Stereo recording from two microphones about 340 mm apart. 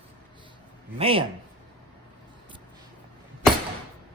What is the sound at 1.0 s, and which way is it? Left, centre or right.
Speech, centre.